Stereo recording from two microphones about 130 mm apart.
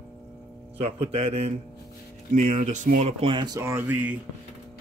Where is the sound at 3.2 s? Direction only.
40° right (ahead or behind).